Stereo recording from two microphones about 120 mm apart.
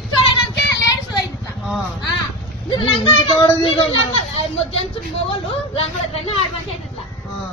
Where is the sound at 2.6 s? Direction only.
45° left (ahead or behind).